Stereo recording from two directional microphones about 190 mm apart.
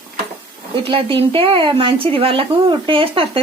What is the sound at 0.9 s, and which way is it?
A woman's voice, 30° right (ahead or behind).